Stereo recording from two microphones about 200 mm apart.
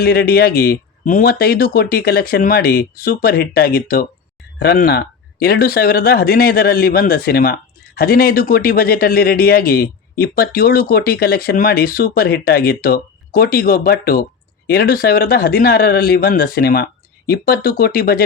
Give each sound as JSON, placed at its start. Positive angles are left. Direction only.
{"t": 0.0, "sound": "speech", "side_deg": 50}